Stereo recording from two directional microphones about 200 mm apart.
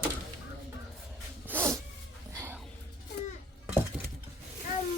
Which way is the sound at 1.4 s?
10° right (ahead or behind).